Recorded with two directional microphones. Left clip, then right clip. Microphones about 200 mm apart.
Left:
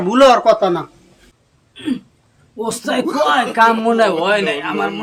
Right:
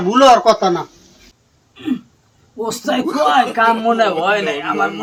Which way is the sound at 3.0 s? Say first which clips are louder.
Right 1 dB; centre (ahead or behind).